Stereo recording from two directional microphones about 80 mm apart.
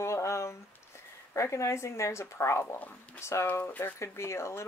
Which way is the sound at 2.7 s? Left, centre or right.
Left.